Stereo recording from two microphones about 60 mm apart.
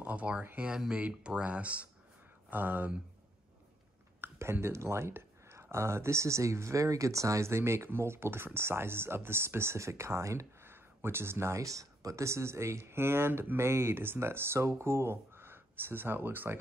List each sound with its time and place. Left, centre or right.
0.0 s speech: right
0.6 s speech: centre; by 2.9 s right
4.2 s speech: right
10.6 s a sound: right
11.6 s speech: right